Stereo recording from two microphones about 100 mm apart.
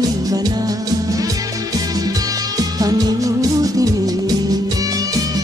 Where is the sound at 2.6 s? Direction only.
40° right (ahead or behind).